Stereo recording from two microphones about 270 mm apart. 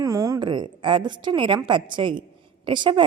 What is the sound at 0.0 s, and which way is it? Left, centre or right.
A woman's voice, centre.